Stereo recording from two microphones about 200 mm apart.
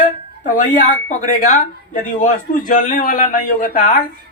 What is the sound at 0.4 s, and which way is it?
A man's voice, 40° left (ahead or behind).